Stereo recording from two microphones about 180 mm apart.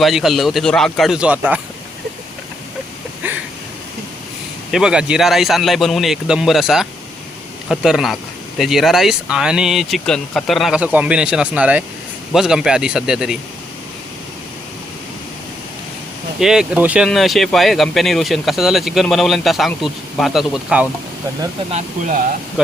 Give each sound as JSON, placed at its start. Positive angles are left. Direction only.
{"t": 0.0, "sound": "speech", "side_deg": 0}
{"t": 3.2, "sound": "a sound", "side_deg": -10}
{"t": 4.7, "sound": "speech", "side_deg": -5}
{"t": 16.4, "sound": "speech", "side_deg": -5}
{"t": 21.7, "sound": "speech", "side_deg": -40}
{"t": 22.6, "sound": "speech", "side_deg": -5}